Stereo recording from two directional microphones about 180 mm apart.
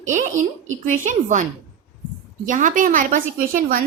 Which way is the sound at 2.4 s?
45° right (ahead or behind).